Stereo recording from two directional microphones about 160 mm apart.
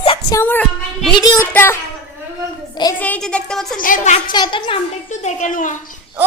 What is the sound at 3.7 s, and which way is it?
Speech, 55° left (ahead or behind).